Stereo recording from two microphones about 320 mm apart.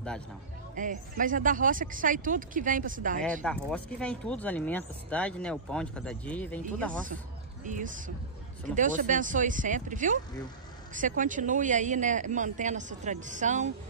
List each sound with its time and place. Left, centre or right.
0.7 s speech: right
3.4 s speech: centre
7.6 s speech: right